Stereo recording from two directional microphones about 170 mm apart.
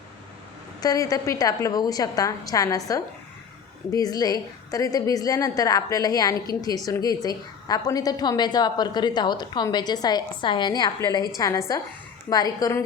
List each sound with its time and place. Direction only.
0.8 s a woman's voice: 20° left (ahead or behind)